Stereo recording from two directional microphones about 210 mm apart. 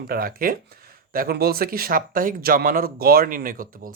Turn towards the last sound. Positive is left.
turn(degrees=-40)  # may be behind; listen again after turning